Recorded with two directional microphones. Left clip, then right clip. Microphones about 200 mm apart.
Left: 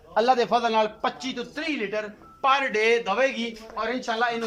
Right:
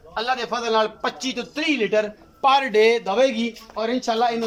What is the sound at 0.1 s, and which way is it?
A man's voice, 30° left (ahead or behind).